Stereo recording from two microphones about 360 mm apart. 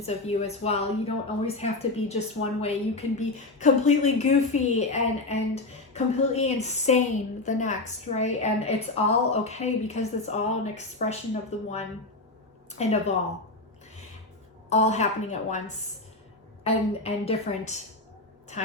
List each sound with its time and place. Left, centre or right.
0.0 s a woman's voice: centre
12.8 s a woman's voice: centre
14.7 s a woman's voice: centre
16.6 s a woman's voice: centre